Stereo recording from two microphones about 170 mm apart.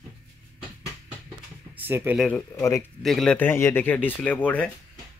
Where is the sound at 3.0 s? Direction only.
Centre (ahead or behind).